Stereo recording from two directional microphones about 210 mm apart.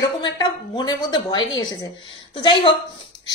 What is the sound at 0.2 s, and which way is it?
A woman's voice, 20° left (ahead or behind).